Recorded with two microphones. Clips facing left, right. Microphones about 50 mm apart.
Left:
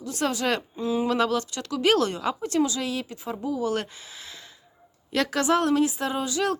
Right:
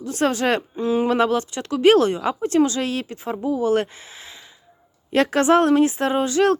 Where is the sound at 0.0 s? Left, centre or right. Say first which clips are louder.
Right 6 dB; right.